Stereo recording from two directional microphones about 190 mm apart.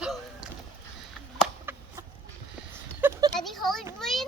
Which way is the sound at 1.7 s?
10° right (ahead or behind).